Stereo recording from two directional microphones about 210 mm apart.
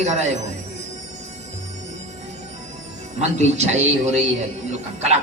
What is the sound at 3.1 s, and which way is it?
Speech, 30° right (ahead or behind).